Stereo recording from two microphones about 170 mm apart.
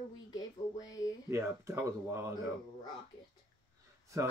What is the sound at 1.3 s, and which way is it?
Speech, 15° right (ahead or behind).